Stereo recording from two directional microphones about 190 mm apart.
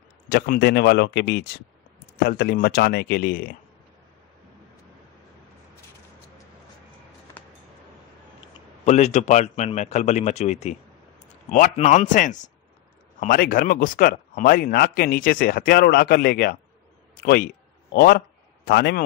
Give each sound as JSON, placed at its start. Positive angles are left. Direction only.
{"t": 0.3, "sound": "speech", "side_deg": 60}
{"t": 8.8, "sound": "a man's voice", "side_deg": 35}